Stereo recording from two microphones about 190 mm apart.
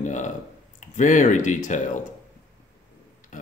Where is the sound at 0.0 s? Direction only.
40° left (ahead or behind).